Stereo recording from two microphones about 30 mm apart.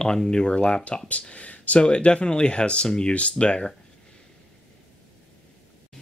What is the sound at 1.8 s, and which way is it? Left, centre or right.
Speech, left.